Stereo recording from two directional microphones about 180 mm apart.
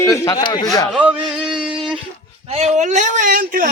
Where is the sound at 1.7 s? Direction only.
30° right (ahead or behind).